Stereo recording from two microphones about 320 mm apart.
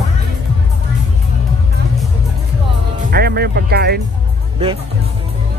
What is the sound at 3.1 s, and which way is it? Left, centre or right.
Music, right.